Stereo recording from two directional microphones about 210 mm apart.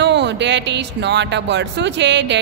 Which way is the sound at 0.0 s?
55° right (ahead or behind).